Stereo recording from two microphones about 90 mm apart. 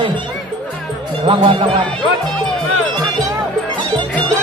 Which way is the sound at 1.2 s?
75° right (ahead or behind).